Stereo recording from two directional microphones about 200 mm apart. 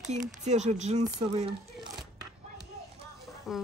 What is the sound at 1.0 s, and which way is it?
Speech, 20° right (ahead or behind).